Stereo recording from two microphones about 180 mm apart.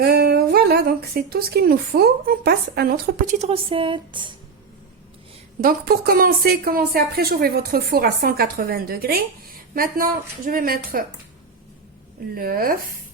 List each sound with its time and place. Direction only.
0.0 s speech: 60° right (ahead or behind)
3.3 s a woman's voice: 35° right (ahead or behind)
5.6 s a woman's voice: 55° right (ahead or behind)
12.3 s speech: 55° right (ahead or behind)